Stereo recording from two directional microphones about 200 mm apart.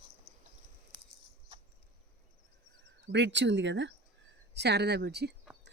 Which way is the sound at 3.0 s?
60° right (ahead or behind).